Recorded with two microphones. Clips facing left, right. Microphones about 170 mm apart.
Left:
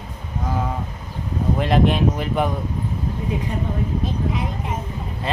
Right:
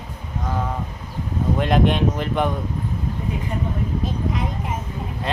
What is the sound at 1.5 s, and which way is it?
Speech, centre (ahead or behind).